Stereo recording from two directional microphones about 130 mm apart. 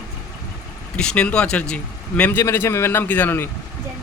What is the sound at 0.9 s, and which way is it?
Speech, 5° left (ahead or behind).